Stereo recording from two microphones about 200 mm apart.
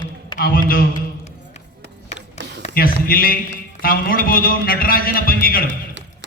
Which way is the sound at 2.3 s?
60° right (ahead or behind).